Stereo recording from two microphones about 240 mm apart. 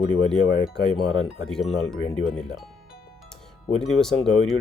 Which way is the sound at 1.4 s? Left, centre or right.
Centre.